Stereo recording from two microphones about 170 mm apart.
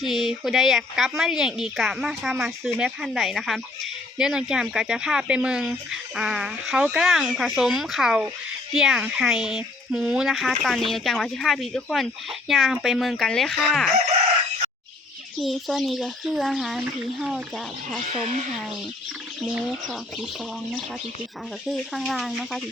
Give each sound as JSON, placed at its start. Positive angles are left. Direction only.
{"t": 0.0, "sound": "speech", "side_deg": 0}
{"t": 15.4, "sound": "speech", "side_deg": 0}
{"t": 18.0, "sound": "speech", "side_deg": -45}
{"t": 19.4, "sound": "speech", "side_deg": 0}
{"t": 21.7, "sound": "speech", "side_deg": 0}